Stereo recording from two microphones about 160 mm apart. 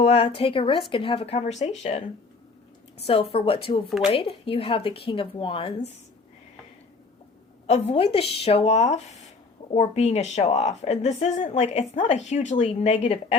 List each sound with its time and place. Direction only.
0.0 s speech: 40° left (ahead or behind)
3.8 s speech: centre (ahead or behind)
4.1 s speech: 35° left (ahead or behind)
7.7 s speech: 40° left (ahead or behind)